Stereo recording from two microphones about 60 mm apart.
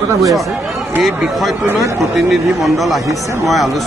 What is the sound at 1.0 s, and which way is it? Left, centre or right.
Speech, centre.